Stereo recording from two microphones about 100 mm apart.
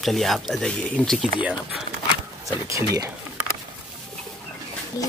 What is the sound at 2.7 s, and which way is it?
Speech, 40° right (ahead or behind).